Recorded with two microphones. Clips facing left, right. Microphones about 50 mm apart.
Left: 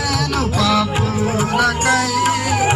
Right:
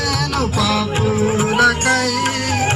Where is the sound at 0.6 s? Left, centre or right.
Centre.